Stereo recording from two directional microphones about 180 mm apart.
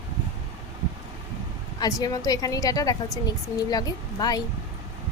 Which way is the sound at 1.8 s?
20° left (ahead or behind).